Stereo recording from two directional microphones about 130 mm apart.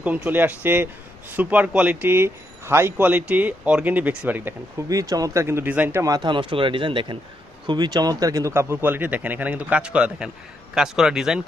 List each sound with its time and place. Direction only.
0.0 s speech: 10° right (ahead or behind)
4.9 s speech: 25° right (ahead or behind)
6.0 s a man's voice: 30° right (ahead or behind); by 11.4 s 5° right (ahead or behind)